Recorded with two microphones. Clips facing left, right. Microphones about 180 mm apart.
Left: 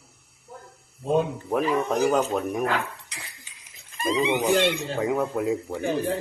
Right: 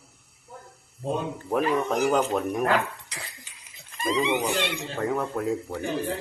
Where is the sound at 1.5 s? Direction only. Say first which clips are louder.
Even; centre (ahead or behind).